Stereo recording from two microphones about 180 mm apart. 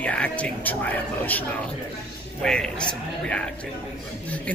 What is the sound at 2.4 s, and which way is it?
A man's voice, 5° left (ahead or behind).